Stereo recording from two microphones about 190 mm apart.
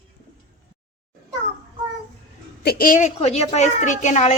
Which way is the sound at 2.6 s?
55° left (ahead or behind).